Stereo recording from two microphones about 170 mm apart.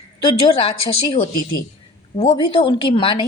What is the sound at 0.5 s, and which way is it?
A woman's voice, 30° left (ahead or behind).